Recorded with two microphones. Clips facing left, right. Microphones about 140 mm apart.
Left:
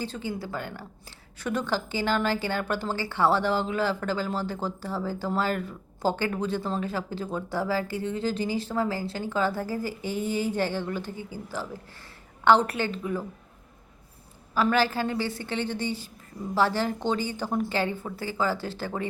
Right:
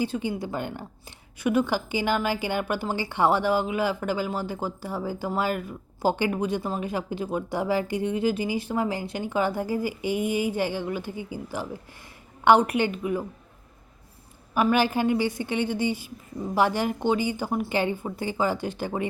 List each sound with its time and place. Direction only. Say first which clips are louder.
0.0 s a woman's voice: right 5 dB; 15° right (ahead or behind)
14.5 s a woman's voice: right 2 dB; 15° right (ahead or behind)